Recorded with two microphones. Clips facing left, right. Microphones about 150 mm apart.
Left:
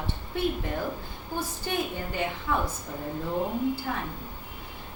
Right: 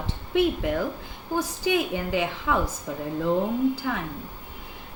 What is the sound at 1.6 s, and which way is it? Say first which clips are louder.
Speech: right 7 dB; 90° right.